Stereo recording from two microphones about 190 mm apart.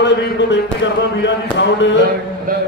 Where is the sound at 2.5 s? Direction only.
45° right (ahead or behind).